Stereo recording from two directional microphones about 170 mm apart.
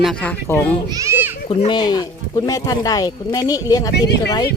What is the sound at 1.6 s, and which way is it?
Speech, 25° left (ahead or behind).